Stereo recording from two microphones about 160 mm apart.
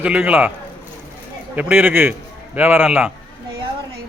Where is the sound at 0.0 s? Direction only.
10° right (ahead or behind).